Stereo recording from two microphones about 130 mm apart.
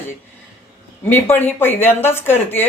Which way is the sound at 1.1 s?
15° left (ahead or behind).